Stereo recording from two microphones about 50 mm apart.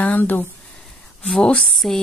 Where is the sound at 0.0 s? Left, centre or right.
Left.